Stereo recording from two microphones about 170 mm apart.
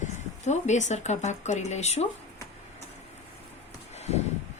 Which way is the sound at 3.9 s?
40° left (ahead or behind).